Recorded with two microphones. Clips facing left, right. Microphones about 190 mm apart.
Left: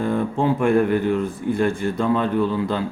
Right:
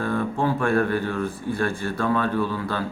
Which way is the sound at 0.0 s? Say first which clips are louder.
Left 3 dB; 15° left (ahead or behind).